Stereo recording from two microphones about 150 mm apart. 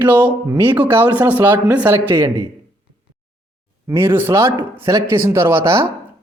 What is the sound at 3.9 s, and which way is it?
A man's voice, 15° right (ahead or behind).